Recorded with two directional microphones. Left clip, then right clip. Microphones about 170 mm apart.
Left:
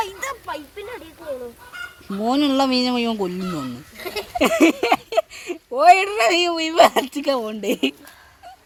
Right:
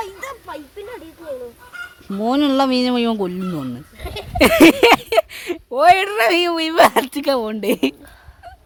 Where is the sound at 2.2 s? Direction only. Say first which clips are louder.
Right 2 dB; 10° right (ahead or behind).